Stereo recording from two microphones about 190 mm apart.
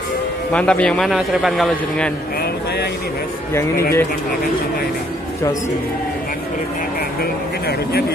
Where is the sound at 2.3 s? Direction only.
55° left (ahead or behind).